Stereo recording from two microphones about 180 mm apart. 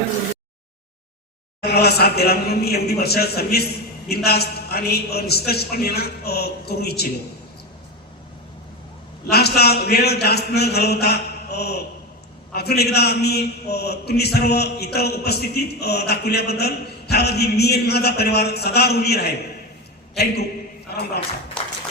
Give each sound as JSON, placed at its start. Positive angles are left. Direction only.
{"t": 1.6, "sound": "a man's voice", "side_deg": 65}
{"t": 9.3, "sound": "a man's voice", "side_deg": 60}
{"t": 20.9, "sound": "a sound", "side_deg": 60}
{"t": 21.6, "sound": "tap", "side_deg": 5}